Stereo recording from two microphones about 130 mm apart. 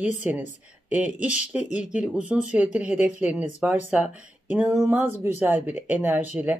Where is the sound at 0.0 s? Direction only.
10° right (ahead or behind).